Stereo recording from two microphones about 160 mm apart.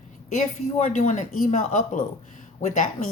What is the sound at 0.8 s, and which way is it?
Speech, 45° left (ahead or behind).